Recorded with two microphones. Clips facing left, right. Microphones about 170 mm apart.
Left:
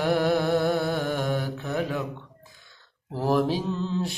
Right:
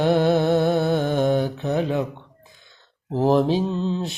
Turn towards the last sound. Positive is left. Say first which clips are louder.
# right 3 dB
turn(degrees=-20)  # may be behind; listen again after turning